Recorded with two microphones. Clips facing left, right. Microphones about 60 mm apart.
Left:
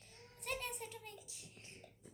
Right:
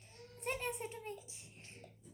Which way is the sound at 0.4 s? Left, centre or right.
Right.